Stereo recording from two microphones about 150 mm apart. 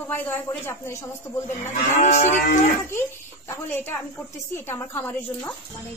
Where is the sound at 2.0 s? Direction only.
50° left (ahead or behind).